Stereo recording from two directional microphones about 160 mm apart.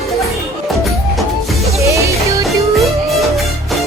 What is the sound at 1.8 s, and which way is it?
Music, 20° right (ahead or behind).